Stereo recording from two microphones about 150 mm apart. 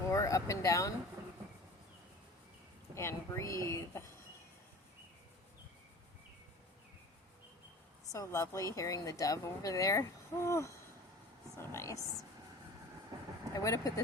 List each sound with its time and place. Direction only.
0.0 s speech: 20° left (ahead or behind)
2.9 s speech: 20° left (ahead or behind)
8.1 s speech: 25° left (ahead or behind)
13.5 s speech: 20° left (ahead or behind)